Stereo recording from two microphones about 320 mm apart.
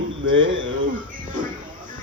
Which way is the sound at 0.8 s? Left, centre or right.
Right.